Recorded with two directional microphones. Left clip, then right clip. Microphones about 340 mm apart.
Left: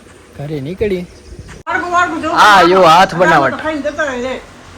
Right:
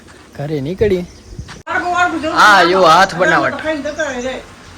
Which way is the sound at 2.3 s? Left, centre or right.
Centre.